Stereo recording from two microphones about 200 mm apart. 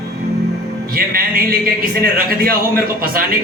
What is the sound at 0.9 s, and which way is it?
A man's voice, 45° right (ahead or behind).